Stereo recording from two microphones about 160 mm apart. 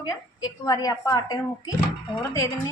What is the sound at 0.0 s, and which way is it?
A woman's voice, 25° left (ahead or behind).